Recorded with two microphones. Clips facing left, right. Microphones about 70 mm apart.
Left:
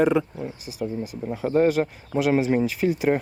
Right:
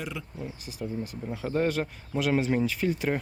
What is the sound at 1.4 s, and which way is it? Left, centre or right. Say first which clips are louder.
Speech: left 7 dB; centre.